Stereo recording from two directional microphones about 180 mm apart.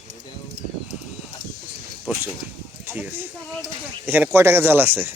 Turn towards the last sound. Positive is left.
turn(degrees=-10)  # may be behind; listen again after turning